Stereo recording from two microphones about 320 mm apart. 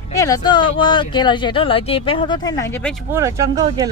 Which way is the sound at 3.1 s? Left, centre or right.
Centre.